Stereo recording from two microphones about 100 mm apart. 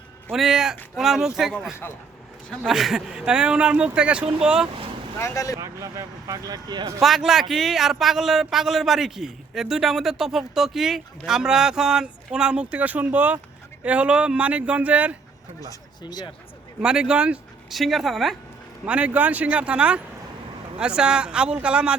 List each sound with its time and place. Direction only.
0.3 s a man's voice: 5° right (ahead or behind)
2.5 s speech: centre (ahead or behind)
5.2 s speech: 35° left (ahead or behind)
5.5 s speech: 30° right (ahead or behind)
7.0 s a man's voice: 5° right (ahead or behind)
15.7 s speech: 45° left (ahead or behind)
16.8 s speech: 10° right (ahead or behind)
17.7 s a man's voice: centre (ahead or behind)
18.9 s speech: 10° right (ahead or behind)